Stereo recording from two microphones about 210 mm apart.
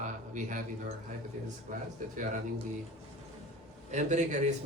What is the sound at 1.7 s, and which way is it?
Speech, 40° right (ahead or behind).